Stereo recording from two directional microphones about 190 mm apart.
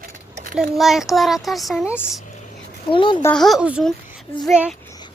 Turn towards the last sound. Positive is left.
turn(degrees=-5)  # may be behind; listen again after turning